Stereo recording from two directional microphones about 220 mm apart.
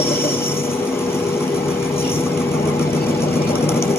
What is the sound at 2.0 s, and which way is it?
Vehicle, 10° left (ahead or behind).